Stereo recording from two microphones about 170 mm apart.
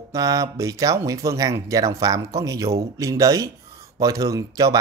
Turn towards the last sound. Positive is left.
turn(degrees=-20)  # may be behind; listen again after turning